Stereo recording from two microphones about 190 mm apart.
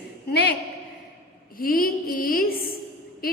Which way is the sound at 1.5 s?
50° left (ahead or behind).